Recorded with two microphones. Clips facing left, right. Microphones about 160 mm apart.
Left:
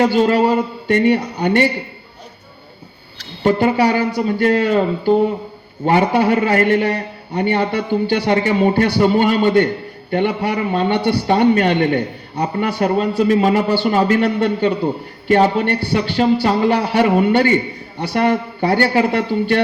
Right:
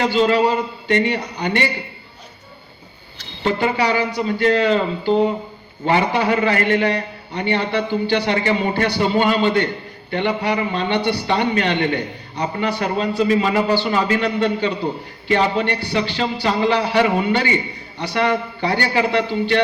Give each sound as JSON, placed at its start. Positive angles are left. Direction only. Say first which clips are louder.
{"t": 0.0, "sound": "a man's voice", "louder": "left 3 dB", "side_deg": 50}
{"t": 3.4, "sound": "a man's voice", "louder": "left 5 dB", "side_deg": 50}